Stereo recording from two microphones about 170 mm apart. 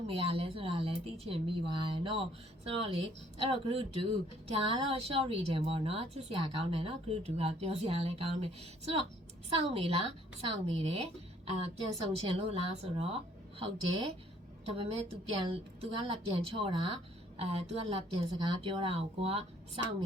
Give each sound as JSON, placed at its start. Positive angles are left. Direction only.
{"t": 0.1, "sound": "a woman's voice", "side_deg": -35}